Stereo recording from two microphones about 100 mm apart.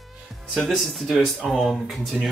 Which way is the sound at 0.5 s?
5° left (ahead or behind).